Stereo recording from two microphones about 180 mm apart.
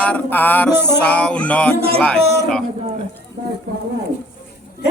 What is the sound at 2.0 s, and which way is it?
Speech, 5° left (ahead or behind).